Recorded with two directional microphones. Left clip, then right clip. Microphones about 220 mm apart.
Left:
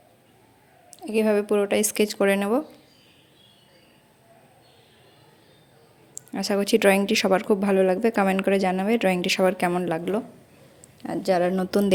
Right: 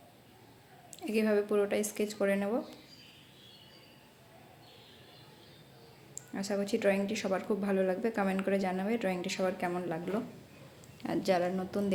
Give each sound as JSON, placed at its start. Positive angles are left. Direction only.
{"t": 1.1, "sound": "a woman's voice", "side_deg": 35}
{"t": 6.1, "sound": "a woman's voice", "side_deg": 40}
{"t": 11.0, "sound": "speech", "side_deg": 20}
{"t": 11.4, "sound": "a woman's voice", "side_deg": 45}